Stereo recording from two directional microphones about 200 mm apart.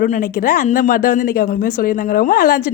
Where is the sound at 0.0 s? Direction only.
40° left (ahead or behind).